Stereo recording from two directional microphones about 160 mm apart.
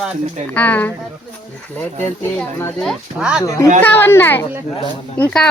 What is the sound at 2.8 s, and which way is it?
Speech, 5° right (ahead or behind).